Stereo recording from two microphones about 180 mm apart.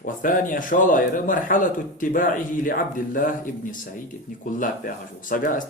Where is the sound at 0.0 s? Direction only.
50° left (ahead or behind).